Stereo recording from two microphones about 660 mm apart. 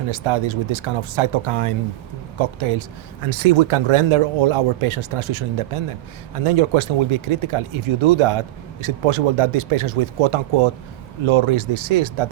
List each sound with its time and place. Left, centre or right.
0.1 s a man's voice: right